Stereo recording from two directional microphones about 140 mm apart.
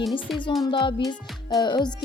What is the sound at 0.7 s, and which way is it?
Music, 35° left (ahead or behind).